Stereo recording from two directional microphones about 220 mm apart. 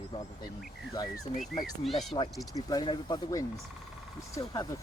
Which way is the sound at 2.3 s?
Centre (ahead or behind).